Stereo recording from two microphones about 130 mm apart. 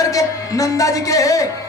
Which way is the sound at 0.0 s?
25° left (ahead or behind).